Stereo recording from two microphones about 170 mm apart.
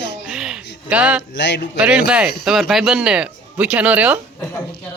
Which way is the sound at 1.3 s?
90° left.